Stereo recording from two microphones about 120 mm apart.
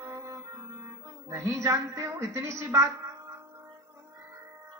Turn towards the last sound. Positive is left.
turn(degrees=-25)  # may be behind; listen again after turning